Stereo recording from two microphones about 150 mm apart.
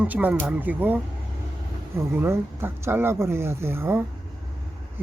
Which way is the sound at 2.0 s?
15° right (ahead or behind).